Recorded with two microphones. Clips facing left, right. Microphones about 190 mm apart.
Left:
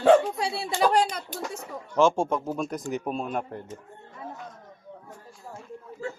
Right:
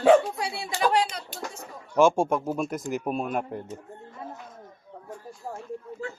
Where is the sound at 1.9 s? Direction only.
10° right (ahead or behind).